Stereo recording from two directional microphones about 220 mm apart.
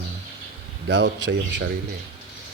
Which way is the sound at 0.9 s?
50° right (ahead or behind).